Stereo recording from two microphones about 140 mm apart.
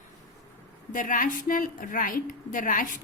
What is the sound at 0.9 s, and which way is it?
A woman's voice, 70° left (ahead or behind).